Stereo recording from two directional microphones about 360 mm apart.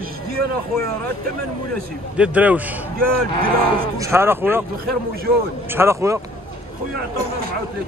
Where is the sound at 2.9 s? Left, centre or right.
Right.